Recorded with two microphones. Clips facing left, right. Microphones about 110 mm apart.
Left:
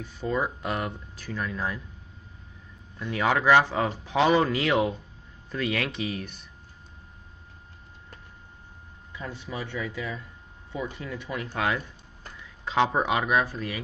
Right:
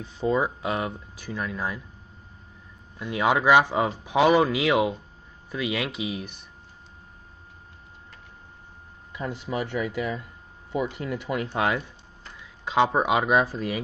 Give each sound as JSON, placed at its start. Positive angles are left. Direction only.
{"t": 0.3, "sound": "speech", "side_deg": -10}
{"t": 3.0, "sound": "speech", "side_deg": -10}
{"t": 9.1, "sound": "speech", "side_deg": -15}